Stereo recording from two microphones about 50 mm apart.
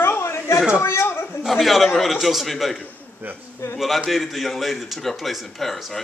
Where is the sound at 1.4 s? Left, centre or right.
Centre.